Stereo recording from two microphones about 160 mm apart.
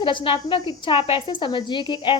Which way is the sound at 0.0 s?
30° left (ahead or behind).